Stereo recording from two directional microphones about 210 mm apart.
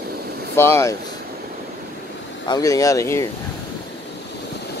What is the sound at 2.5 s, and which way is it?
Speech, 15° left (ahead or behind).